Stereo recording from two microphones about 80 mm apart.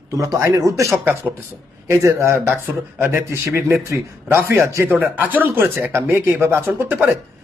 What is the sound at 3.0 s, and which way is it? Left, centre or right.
A man's voice, right.